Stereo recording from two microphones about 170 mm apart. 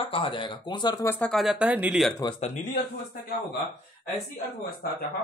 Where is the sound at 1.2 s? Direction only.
Centre (ahead or behind).